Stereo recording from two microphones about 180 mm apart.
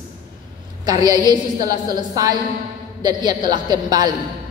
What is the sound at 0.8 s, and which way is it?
A woman's voice, 20° right (ahead or behind).